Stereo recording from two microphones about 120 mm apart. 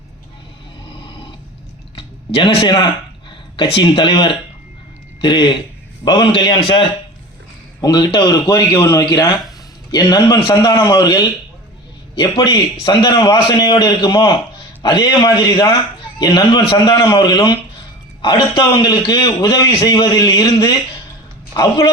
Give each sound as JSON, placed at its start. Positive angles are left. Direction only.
{"t": 2.0, "sound": "a man's voice", "side_deg": 45}
{"t": 8.7, "sound": "a man's voice", "side_deg": 25}